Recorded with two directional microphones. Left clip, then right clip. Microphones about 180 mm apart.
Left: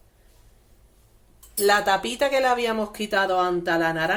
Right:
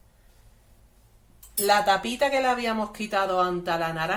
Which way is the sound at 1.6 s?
45° left (ahead or behind).